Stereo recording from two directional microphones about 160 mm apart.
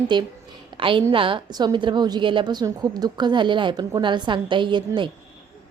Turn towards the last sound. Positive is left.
turn(degrees=-30)  # may be behind; listen again after turning